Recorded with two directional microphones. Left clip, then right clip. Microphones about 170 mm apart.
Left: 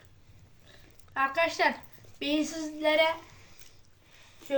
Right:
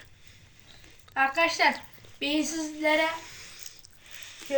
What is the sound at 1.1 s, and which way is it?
Child singing, 40° left (ahead or behind).